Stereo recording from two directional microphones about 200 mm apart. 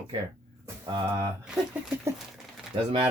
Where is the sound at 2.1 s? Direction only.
15° right (ahead or behind).